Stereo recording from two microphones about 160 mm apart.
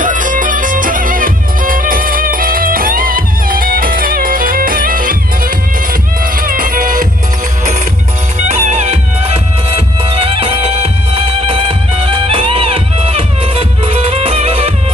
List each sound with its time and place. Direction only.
0.0 s music: 55° right (ahead or behind)
8.4 s music: 45° right (ahead or behind)